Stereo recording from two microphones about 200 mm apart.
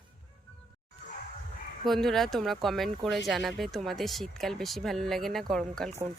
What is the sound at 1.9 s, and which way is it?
Speech, centre (ahead or behind).